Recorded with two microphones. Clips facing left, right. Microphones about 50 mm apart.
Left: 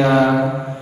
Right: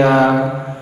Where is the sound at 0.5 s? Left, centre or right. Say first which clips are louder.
Even; centre.